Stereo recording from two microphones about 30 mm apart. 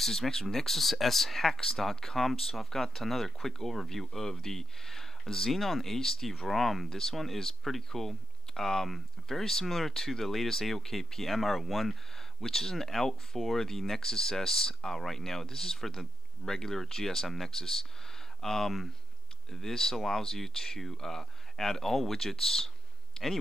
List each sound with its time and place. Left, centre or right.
0.0 s speech: centre
6.4 s speech: centre
6.9 s speech: centre
12.2 s speech: centre